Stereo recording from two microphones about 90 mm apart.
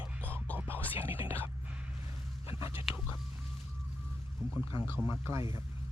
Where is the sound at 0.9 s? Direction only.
25° right (ahead or behind).